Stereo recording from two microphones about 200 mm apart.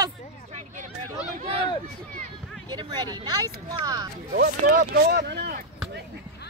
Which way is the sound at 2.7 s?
20° right (ahead or behind).